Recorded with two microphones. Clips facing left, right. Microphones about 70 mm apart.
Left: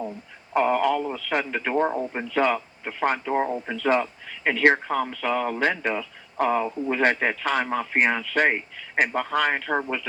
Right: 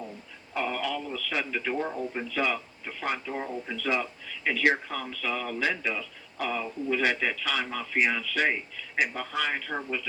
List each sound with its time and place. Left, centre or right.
0.5 s speech: left